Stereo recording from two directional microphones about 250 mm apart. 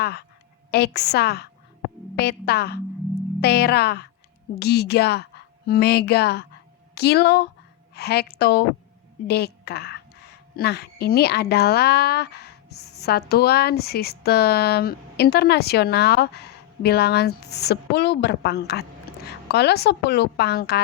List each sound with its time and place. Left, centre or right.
0.0 s a woman's voice: left